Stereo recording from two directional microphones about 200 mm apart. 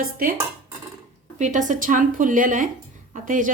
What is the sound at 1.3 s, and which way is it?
Speech, 35° right (ahead or behind).